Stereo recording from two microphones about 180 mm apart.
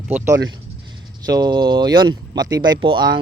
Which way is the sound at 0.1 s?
15° right (ahead or behind).